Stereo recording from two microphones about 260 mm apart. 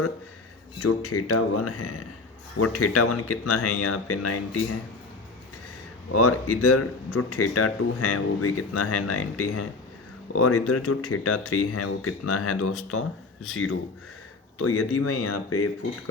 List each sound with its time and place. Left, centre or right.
0.8 s speech: left
6.1 s speech: left